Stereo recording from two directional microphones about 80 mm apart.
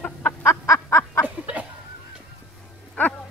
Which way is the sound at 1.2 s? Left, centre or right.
Centre.